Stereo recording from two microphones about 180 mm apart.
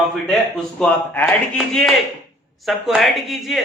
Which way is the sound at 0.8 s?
10° left (ahead or behind).